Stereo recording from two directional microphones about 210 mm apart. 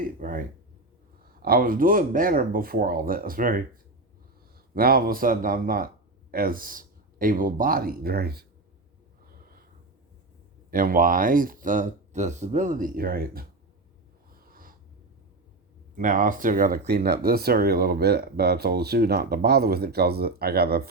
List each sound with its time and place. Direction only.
0.0 s speech: 40° right (ahead or behind)
4.7 s speech: 45° right (ahead or behind)
9.2 s snort: 45° right (ahead or behind)
10.7 s speech: 40° right (ahead or behind)
14.3 s snort: 45° right (ahead or behind)
16.0 s speech: 40° right (ahead or behind)